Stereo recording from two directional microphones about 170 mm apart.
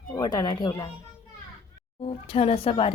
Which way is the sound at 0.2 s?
25° left (ahead or behind).